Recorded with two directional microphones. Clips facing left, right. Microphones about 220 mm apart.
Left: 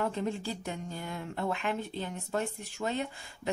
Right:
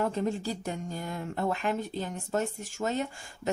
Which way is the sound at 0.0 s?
40° right (ahead or behind).